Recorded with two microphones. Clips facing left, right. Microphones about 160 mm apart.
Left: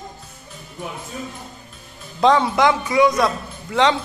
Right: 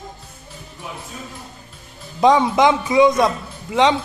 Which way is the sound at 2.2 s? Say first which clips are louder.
Right 2 dB; 15° right (ahead or behind).